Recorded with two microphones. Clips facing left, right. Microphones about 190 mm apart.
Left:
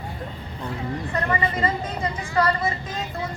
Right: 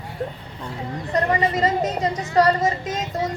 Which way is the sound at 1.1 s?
40° right (ahead or behind).